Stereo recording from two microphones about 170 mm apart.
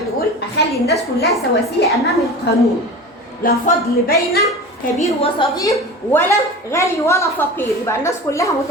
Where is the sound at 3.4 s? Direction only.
60° left (ahead or behind).